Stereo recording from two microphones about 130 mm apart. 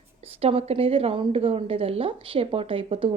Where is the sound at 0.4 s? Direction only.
50° right (ahead or behind).